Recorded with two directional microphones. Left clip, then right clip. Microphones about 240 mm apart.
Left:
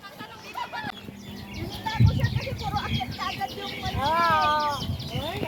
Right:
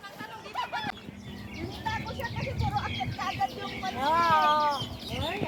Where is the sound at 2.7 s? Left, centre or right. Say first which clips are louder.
Left 3 dB; centre.